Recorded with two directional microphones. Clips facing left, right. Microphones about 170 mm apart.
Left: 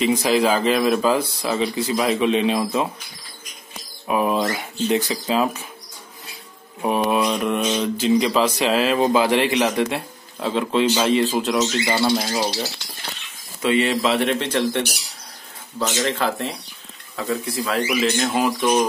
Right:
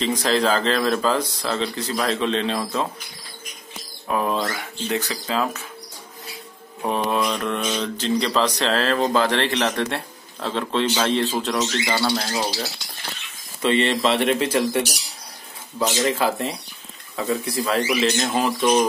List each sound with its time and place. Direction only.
0.0 s speech: 10° left (ahead or behind)
4.1 s speech: 15° left (ahead or behind)
6.8 s speech: 10° left (ahead or behind)
12.0 s speech: 20° left (ahead or behind)
12.3 s speech: centre (ahead or behind)
16.0 s speech: 5° right (ahead or behind)